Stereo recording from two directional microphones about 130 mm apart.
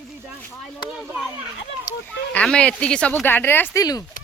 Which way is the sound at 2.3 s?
10° left (ahead or behind).